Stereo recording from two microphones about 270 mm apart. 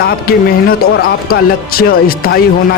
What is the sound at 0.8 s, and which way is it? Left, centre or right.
A man's voice, left.